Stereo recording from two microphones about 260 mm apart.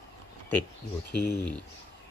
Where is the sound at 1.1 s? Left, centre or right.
Left.